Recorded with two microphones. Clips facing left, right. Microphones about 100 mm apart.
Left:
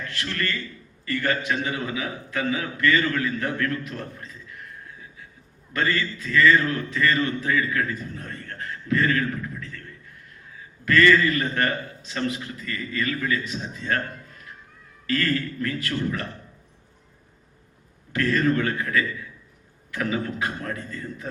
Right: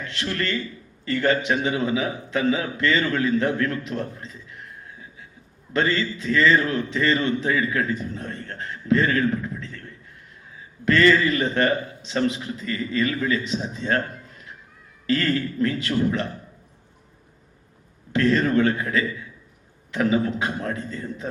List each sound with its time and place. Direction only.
0.0 s a man's voice: 20° right (ahead or behind)
5.7 s a man's voice: 20° right (ahead or behind)
10.8 s a man's voice: 25° right (ahead or behind)
18.1 s a man's voice: 20° right (ahead or behind)